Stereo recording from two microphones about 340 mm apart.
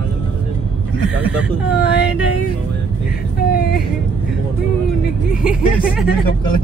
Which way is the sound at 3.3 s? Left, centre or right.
Left.